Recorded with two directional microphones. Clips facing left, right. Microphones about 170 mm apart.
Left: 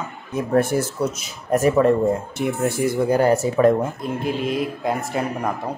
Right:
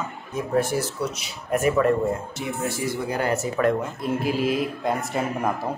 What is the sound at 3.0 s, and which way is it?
Speech, 40° left (ahead or behind).